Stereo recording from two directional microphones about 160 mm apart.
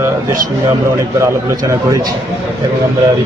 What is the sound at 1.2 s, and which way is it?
Speech, 20° right (ahead or behind).